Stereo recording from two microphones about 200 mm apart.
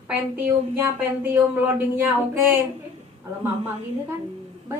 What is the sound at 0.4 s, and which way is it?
A woman's voice, 10° right (ahead or behind).